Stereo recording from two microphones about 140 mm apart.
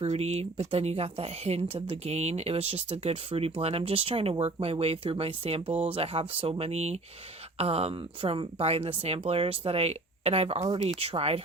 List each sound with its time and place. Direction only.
0.0 s speech: 50° right (ahead or behind)